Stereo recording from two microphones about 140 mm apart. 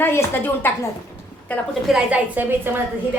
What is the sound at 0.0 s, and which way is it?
Speech, 15° left (ahead or behind).